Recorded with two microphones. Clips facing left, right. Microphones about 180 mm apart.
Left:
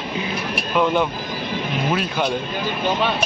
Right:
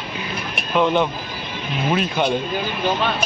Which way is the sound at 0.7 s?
5° left (ahead or behind).